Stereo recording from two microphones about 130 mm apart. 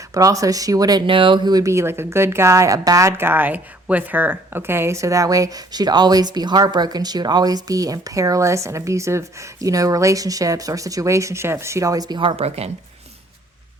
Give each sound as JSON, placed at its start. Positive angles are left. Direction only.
{"t": 0.1, "sound": "speech", "side_deg": -25}
{"t": 12.4, "sound": "speech", "side_deg": -55}